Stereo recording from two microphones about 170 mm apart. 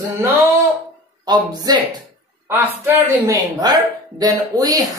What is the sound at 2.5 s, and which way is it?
Speech, 15° right (ahead or behind).